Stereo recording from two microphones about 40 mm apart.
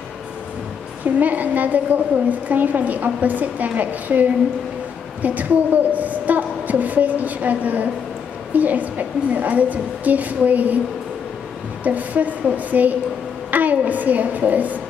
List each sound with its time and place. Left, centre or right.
1.2 s a woman's voice: right
11.8 s a woman's voice: right